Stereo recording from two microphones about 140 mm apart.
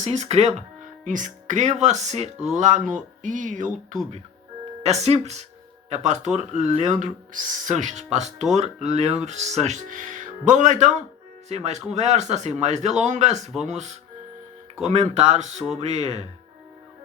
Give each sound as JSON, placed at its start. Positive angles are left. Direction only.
{"t": 0.0, "sound": "speech", "side_deg": -50}
{"t": 1.0, "sound": "speech", "side_deg": -65}
{"t": 2.6, "sound": "speech", "side_deg": -65}
{"t": 4.8, "sound": "speech", "side_deg": -50}